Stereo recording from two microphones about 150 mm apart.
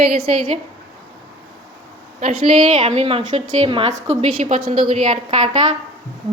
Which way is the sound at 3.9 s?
50° right (ahead or behind).